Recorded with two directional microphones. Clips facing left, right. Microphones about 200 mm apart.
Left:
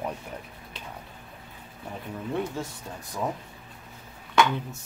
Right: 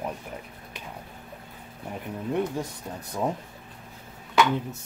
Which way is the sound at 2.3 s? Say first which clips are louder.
Right 3 dB; 15° right (ahead or behind).